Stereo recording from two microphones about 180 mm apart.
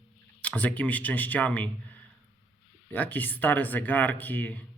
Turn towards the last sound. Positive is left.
turn(degrees=10)  # may be behind; listen again after turning